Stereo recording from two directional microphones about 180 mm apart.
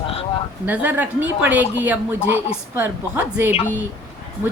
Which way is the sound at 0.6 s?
10° right (ahead or behind).